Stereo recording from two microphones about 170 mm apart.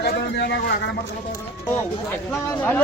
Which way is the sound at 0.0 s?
80° left.